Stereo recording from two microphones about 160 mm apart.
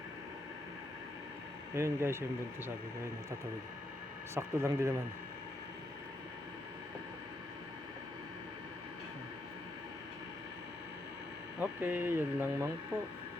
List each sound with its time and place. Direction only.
1.7 s speech: 15° right (ahead or behind)
4.4 s speech: 15° right (ahead or behind)
11.6 s speech: 10° right (ahead or behind)